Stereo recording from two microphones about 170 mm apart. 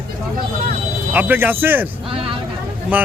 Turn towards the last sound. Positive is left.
turn(degrees=-10)  # may be behind; listen again after turning